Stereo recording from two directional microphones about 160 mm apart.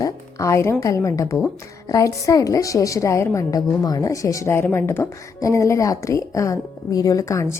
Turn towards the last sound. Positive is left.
turn(degrees=20)  # may be behind; listen again after turning